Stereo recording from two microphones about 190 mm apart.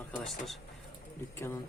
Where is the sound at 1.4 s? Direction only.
15° left (ahead or behind).